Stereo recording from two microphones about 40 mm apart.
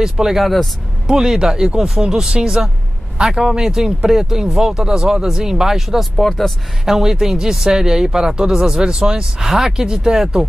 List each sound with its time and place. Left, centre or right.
0.0 s speech: centre
0.4 s speech: centre
1.0 s speech: centre
6.1 s speech: centre
6.9 s speech: centre